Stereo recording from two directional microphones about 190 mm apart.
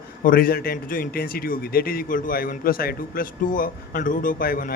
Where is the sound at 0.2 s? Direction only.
50° left (ahead or behind).